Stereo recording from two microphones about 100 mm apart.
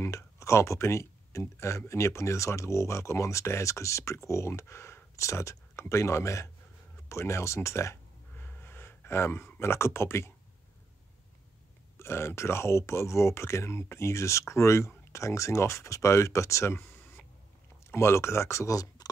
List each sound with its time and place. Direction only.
0.0 s speech: 30° left (ahead or behind)
12.0 s speech: 25° left (ahead or behind)
17.9 s speech: 25° left (ahead or behind)